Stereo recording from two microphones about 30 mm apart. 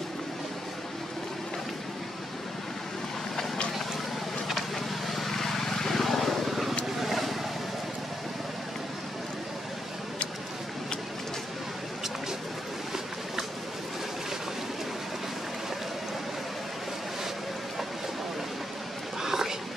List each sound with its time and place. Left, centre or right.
4.6 s vehicle: centre
19.2 s whispering: centre